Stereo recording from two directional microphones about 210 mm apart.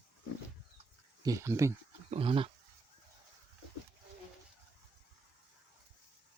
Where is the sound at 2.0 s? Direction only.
25° right (ahead or behind).